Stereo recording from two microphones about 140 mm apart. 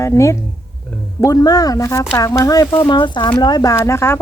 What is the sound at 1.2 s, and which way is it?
Speech, 25° left (ahead or behind).